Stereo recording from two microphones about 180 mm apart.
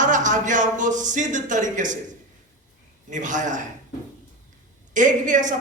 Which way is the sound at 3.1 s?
45° right (ahead or behind).